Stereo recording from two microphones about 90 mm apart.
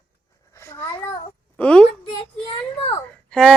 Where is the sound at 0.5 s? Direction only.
30° left (ahead or behind).